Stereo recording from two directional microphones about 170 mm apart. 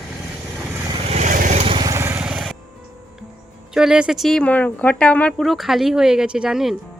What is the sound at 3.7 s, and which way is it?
Speech, 5° right (ahead or behind).